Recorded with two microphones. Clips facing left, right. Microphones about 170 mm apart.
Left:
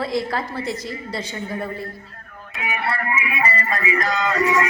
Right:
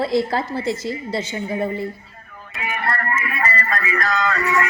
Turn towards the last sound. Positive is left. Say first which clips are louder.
# left 1 dB
turn(degrees=20)  # may be behind; listen again after turning